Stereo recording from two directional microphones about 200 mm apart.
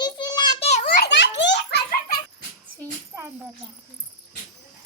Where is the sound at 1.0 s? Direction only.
60° left (ahead or behind).